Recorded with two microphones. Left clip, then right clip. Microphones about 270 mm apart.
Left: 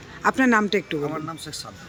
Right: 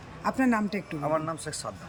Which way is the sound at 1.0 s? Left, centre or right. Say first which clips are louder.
Right 1 dB; centre.